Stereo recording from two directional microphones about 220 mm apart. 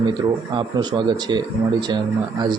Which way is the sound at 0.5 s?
20° right (ahead or behind).